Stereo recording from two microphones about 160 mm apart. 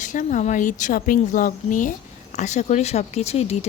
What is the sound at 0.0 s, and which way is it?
Speech, 50° left (ahead or behind).